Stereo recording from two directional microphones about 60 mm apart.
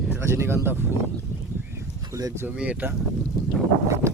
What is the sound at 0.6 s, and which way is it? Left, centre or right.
Speech, right.